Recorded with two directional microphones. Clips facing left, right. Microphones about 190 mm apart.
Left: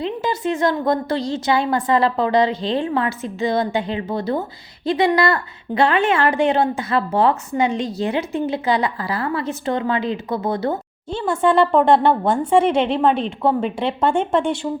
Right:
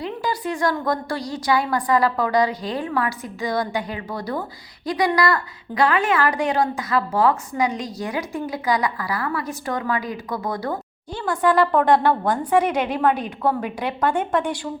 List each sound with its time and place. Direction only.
0.0 s a woman's voice: 25° left (ahead or behind)